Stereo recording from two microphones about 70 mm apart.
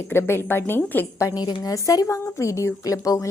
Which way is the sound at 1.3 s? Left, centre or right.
Left.